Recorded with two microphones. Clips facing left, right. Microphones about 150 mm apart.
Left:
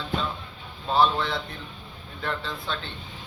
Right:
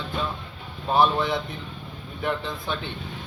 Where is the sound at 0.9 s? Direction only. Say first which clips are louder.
Right 2 dB; 15° right (ahead or behind).